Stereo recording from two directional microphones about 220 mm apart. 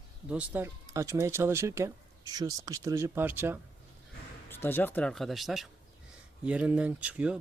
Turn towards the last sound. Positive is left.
turn(degrees=-5)  # may be behind; listen again after turning